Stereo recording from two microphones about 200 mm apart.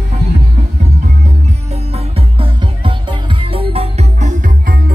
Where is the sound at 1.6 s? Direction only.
30° right (ahead or behind).